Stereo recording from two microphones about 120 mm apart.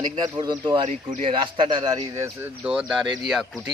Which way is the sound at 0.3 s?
40° right (ahead or behind).